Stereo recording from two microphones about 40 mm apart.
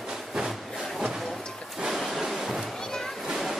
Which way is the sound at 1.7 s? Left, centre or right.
Centre.